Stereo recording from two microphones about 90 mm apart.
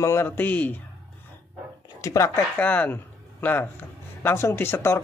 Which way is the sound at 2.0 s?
35° left (ahead or behind).